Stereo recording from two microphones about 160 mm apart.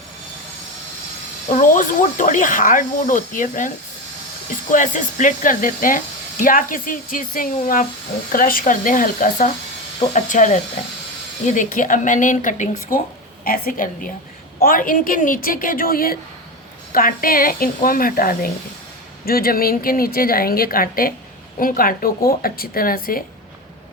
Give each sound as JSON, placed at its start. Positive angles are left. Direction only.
{"t": 1.5, "sound": "speech", "side_deg": 50}
{"t": 4.7, "sound": "speech", "side_deg": 55}
{"t": 13.4, "sound": "speech", "side_deg": 65}